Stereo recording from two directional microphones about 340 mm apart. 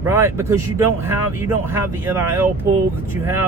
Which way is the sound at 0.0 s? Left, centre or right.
Centre.